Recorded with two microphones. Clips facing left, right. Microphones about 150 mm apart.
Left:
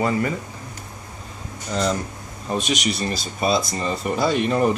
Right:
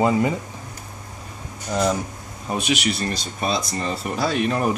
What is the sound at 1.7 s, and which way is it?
Speech, 10° right (ahead or behind).